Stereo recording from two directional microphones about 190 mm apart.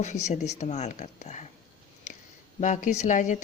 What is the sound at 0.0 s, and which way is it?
A woman's voice, 35° left (ahead or behind).